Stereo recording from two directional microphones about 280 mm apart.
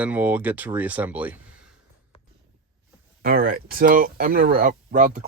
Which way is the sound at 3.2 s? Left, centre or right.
Right.